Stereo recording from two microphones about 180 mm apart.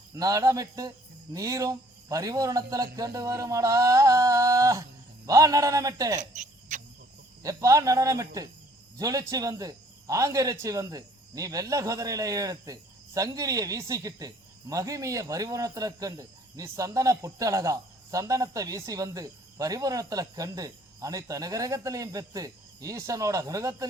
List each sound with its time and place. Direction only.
0.1 s speech: 20° right (ahead or behind)
6.1 s cricket: 40° right (ahead or behind)
7.4 s a man's voice: 20° right (ahead or behind)